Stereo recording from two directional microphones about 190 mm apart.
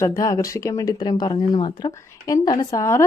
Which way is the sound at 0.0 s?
15° left (ahead or behind).